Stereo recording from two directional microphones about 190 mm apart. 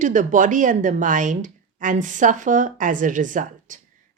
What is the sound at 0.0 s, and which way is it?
Speech, 40° right (ahead or behind).